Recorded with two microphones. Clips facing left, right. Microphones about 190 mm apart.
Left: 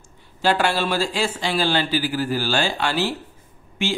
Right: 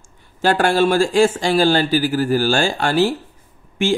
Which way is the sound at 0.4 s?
50° right (ahead or behind).